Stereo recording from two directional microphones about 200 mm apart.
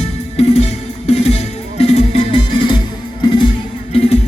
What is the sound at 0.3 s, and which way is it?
Music, 30° left (ahead or behind).